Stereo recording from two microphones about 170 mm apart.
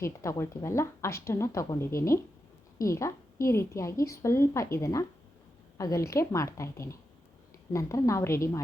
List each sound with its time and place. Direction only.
0.0 s a woman's voice: 15° left (ahead or behind)